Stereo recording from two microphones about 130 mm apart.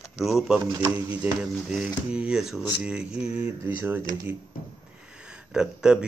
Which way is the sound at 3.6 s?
20° right (ahead or behind).